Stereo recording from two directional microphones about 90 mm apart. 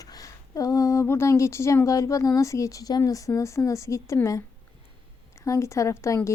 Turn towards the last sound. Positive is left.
turn(degrees=35)  # may be behind; listen again after turning